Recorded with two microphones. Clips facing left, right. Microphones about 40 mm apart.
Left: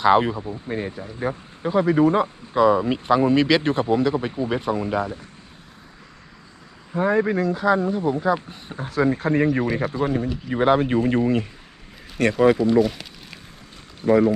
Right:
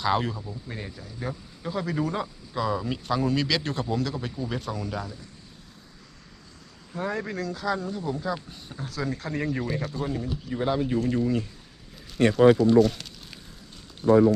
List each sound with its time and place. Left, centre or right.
0.0 s speech: left
6.9 s speech: left
12.8 s speech: centre
14.0 s speech: left